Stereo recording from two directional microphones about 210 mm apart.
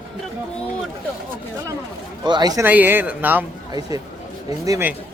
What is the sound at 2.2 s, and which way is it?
A man's voice, 20° right (ahead or behind).